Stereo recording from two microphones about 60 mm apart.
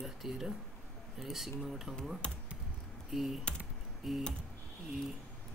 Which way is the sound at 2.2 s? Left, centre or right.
Centre.